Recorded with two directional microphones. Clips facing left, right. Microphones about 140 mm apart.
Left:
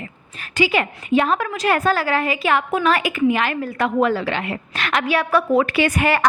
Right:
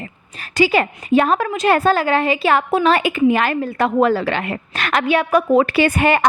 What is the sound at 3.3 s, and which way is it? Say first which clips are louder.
Speech: right 3 dB; 40° right (ahead or behind).